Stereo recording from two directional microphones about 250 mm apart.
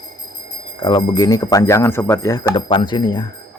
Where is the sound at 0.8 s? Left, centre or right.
Centre.